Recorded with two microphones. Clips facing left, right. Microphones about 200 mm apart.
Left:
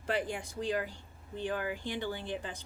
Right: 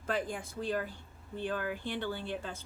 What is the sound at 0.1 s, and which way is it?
A woman's voice, 15° left (ahead or behind).